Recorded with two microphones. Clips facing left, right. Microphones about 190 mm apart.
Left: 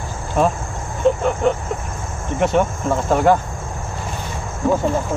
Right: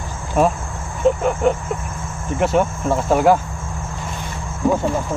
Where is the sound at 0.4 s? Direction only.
10° right (ahead or behind).